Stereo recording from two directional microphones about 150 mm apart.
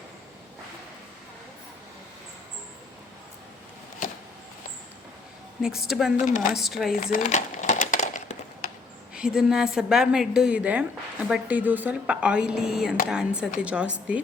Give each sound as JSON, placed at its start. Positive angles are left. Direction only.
{"t": 5.6, "sound": "a woman's voice", "side_deg": -5}
{"t": 6.9, "sound": "speech", "side_deg": 80}
{"t": 7.2, "sound": "a sound", "side_deg": 55}
{"t": 9.1, "sound": "a woman's voice", "side_deg": -5}